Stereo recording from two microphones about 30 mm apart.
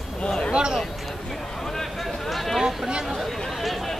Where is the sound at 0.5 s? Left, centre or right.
Right.